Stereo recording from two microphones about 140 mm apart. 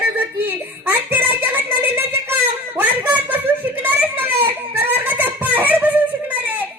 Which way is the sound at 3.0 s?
10° right (ahead or behind).